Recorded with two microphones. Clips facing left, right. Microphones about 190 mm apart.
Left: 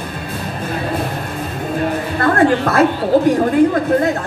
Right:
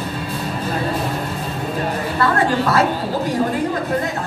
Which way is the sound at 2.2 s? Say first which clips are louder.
Left 4 dB; 50° left (ahead or behind).